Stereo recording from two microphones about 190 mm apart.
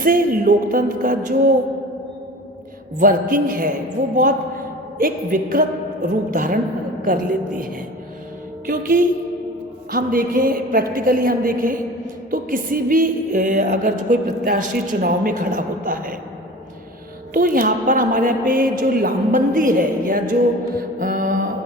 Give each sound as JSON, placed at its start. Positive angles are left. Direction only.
{"t": 0.0, "sound": "music", "side_deg": -45}
{"t": 3.0, "sound": "music", "side_deg": -45}
{"t": 17.3, "sound": "music", "side_deg": -45}
{"t": 20.7, "sound": "mantra", "side_deg": -50}